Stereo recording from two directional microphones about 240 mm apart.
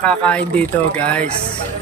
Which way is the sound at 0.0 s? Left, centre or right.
Centre.